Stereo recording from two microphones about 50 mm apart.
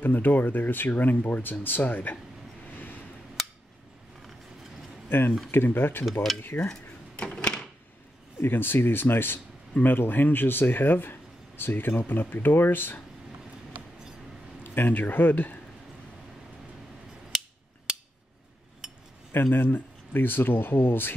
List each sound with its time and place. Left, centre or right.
0.0 s speech: left
5.1 s speech: left
7.2 s a sound: centre
8.4 s speech: left
14.6 s speech: left
19.5 s speech: left